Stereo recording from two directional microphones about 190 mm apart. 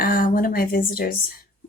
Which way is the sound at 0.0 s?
50° left (ahead or behind).